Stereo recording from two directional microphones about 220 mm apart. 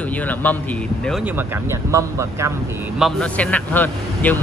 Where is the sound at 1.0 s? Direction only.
5° right (ahead or behind).